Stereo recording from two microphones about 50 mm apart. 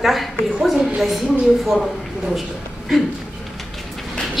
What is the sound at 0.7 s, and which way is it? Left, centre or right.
A woman's voice, centre.